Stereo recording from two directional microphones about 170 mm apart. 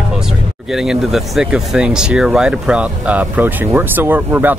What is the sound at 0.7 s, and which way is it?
Speech, centre (ahead or behind).